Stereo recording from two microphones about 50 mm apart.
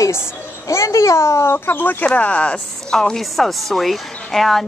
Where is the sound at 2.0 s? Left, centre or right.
Left.